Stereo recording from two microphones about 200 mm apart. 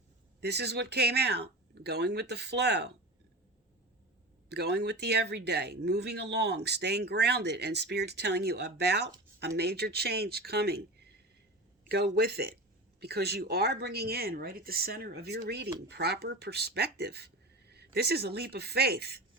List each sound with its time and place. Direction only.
0.4 s speech: 55° right (ahead or behind)
4.4 s speech: 55° right (ahead or behind)
11.9 s speech: 55° right (ahead or behind)